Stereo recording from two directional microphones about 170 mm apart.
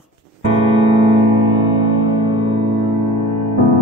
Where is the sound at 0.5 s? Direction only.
35° right (ahead or behind).